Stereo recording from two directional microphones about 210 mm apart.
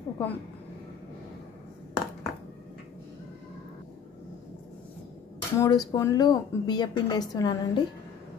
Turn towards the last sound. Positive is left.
turn(degrees=20)  # may be behind; listen again after turning